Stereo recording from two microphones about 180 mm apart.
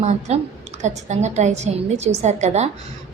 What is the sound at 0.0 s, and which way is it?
A woman's voice, 40° right (ahead or behind).